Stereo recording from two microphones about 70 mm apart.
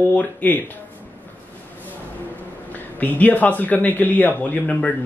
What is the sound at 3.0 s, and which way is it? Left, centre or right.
Speech, left.